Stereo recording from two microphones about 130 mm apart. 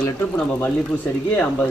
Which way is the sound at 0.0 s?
10° left (ahead or behind).